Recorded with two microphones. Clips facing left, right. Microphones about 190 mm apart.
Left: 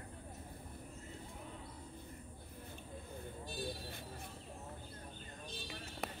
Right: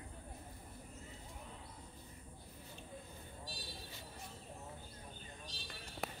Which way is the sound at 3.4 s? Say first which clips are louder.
Left 9 dB; 55° left (ahead or behind).